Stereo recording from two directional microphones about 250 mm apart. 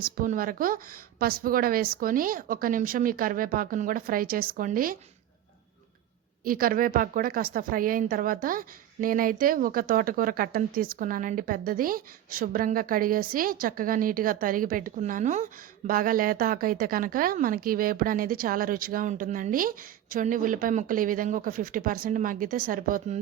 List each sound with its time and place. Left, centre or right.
0.0 s a woman's voice: right
6.4 s a woman's voice: right